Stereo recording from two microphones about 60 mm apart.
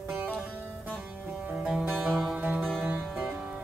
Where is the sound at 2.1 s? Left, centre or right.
Centre.